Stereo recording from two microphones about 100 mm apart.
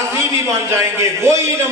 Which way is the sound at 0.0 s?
30° right (ahead or behind).